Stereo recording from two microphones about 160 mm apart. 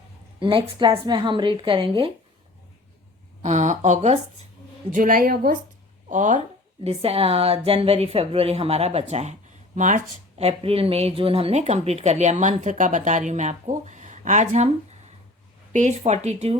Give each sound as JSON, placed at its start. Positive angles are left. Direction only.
{"t": 0.3, "sound": "a woman's voice", "side_deg": -35}
{"t": 3.4, "sound": "speech", "side_deg": -45}
{"t": 4.9, "sound": "a woman's voice", "side_deg": -60}
{"t": 6.1, "sound": "speech", "side_deg": -50}
{"t": 6.8, "sound": "a woman's voice", "side_deg": -40}